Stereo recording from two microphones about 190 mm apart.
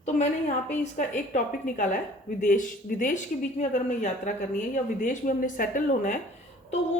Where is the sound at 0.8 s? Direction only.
40° left (ahead or behind).